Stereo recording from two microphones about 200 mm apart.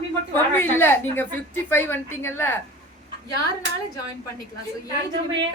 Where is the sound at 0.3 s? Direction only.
10° left (ahead or behind).